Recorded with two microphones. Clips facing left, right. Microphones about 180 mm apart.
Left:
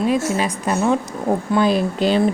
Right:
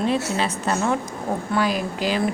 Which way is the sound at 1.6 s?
30° left (ahead or behind).